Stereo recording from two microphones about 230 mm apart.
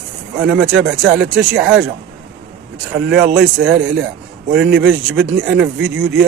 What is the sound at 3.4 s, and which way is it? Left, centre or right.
Speech, right.